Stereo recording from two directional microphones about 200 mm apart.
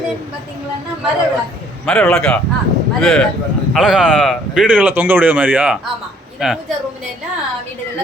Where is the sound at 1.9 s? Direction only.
5° left (ahead or behind).